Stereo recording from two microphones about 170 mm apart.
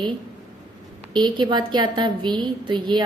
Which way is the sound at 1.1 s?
25° right (ahead or behind).